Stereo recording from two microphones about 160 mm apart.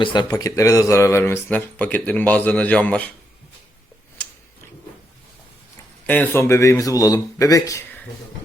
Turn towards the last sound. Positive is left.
turn(degrees=20)  # may be behind; listen again after turning